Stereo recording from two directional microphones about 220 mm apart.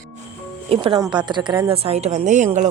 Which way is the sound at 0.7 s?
25° right (ahead or behind).